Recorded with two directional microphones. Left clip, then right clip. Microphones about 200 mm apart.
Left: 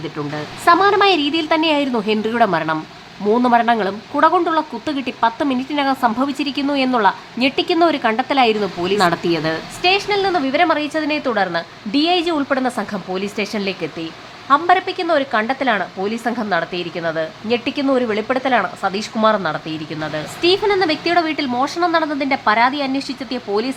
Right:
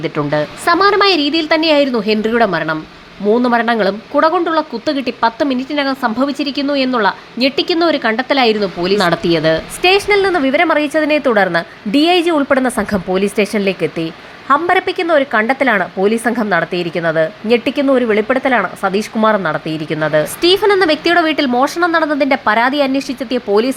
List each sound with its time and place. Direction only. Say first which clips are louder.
0.0 s speech: right 9 dB; 20° right (ahead or behind)
0.6 s speech: right 1 dB; 10° right (ahead or behind)